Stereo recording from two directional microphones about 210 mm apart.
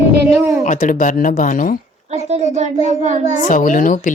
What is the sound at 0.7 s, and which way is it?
Speech, 40° left (ahead or behind).